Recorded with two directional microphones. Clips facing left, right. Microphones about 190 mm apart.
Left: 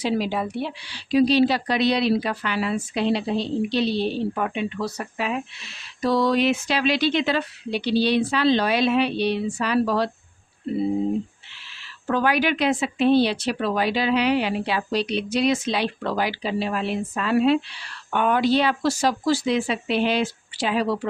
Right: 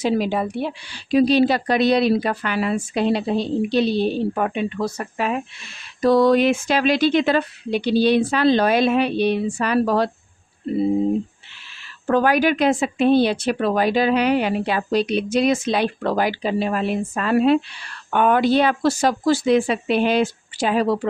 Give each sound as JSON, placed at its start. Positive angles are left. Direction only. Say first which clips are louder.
{"t": 0.0, "sound": "speech", "louder": "right 3 dB", "side_deg": -45}
{"t": 12.0, "sound": "speech", "louder": "right 4 dB", "side_deg": -45}